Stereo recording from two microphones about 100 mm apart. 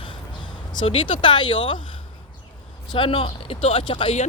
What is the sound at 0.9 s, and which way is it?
Speech, 60° left (ahead or behind).